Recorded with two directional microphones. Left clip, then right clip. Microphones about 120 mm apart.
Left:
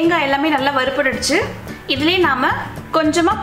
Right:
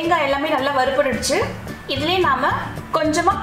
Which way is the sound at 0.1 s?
45° left (ahead or behind).